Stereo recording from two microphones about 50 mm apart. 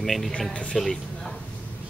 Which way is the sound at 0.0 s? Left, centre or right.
Centre.